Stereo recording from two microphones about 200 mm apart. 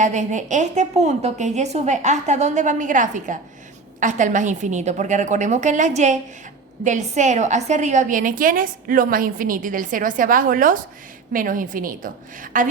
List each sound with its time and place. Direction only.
0.0 s a woman's voice: 35° right (ahead or behind)